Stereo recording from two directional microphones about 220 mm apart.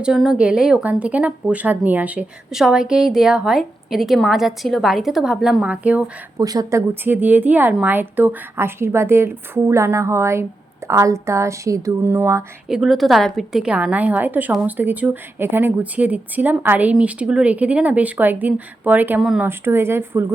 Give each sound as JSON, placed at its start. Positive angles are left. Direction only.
{"t": 0.0, "sound": "a woman's voice", "side_deg": 0}
{"t": 6.4, "sound": "speech", "side_deg": -15}